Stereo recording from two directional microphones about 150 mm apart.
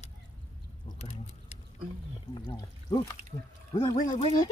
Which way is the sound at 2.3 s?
25° left (ahead or behind).